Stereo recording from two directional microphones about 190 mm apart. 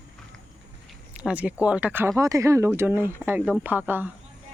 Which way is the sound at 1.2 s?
5° right (ahead or behind).